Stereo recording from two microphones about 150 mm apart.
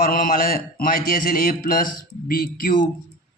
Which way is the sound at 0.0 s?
70° left (ahead or behind).